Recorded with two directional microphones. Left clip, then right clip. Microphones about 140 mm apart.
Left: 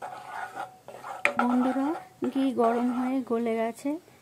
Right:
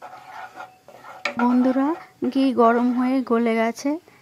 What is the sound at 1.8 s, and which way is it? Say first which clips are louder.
Speech: right 6 dB; 20° right (ahead or behind).